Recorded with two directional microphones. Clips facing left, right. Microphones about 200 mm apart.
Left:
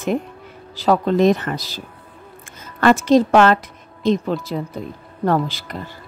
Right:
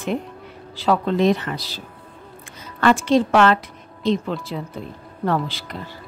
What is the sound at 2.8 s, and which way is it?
A woman's voice, 40° left (ahead or behind).